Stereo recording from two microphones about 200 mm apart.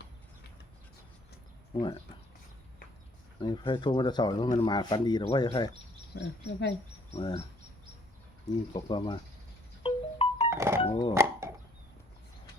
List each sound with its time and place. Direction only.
1.7 s speech: 25° left (ahead or behind)
3.4 s speech: 25° left (ahead or behind)
7.1 s speech: 25° left (ahead or behind)
8.4 s speech: 25° left (ahead or behind)
9.8 s chime: 30° left (ahead or behind)
10.5 s thunk: 15° right (ahead or behind)
10.8 s a sound: 25° left (ahead or behind)
11.1 s speech: 15° right (ahead or behind)